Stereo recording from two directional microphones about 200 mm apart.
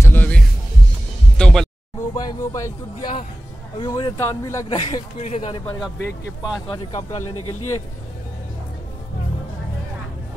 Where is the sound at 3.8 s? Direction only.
20° left (ahead or behind).